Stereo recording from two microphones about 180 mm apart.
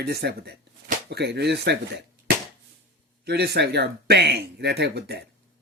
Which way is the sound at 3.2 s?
65° right (ahead or behind).